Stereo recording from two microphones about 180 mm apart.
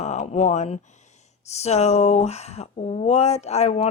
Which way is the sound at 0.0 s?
40° left (ahead or behind).